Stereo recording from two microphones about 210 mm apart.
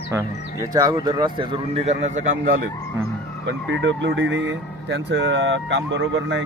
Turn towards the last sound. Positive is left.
turn(degrees=-60)  # may be behind; listen again after turning